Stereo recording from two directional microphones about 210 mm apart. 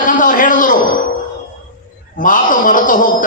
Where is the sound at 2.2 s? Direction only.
40° left (ahead or behind).